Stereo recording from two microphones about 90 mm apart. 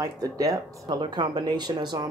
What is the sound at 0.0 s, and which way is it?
Speech, 40° right (ahead or behind).